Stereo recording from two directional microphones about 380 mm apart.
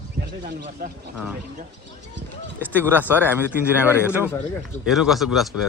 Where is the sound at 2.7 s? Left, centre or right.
Centre.